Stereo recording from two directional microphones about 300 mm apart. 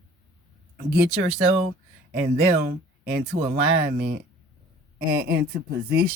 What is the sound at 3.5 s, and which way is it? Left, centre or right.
Speech, right.